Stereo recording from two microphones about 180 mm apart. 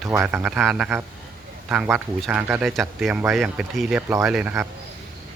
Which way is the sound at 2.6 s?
Centre (ahead or behind).